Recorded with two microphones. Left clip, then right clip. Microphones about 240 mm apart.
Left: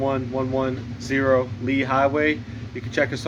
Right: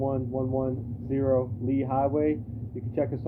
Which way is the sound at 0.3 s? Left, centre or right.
Left.